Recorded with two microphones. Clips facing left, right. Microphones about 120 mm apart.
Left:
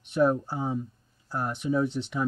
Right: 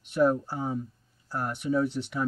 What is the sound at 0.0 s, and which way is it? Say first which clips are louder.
Speech: even; 20° left (ahead or behind).